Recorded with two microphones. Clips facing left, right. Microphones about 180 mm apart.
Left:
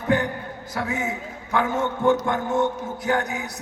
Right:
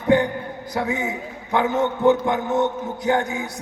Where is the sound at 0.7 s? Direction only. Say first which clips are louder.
Right 3 dB; 25° right (ahead or behind).